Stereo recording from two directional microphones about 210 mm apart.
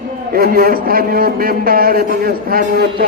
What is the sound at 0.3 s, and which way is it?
A man's voice, 45° right (ahead or behind).